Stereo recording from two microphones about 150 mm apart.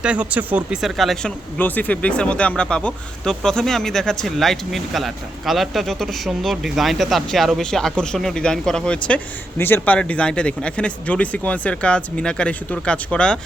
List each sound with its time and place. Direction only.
0.0 s speech: 10° right (ahead or behind)